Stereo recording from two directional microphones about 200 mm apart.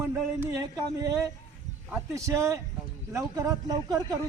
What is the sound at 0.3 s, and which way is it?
A man's voice, 15° right (ahead or behind).